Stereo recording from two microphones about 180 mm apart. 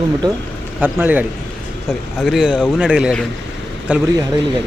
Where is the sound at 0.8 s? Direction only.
10° right (ahead or behind).